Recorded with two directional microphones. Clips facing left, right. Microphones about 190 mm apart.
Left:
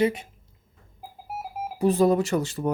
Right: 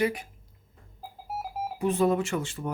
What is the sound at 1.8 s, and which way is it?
Speech, 40° left (ahead or behind).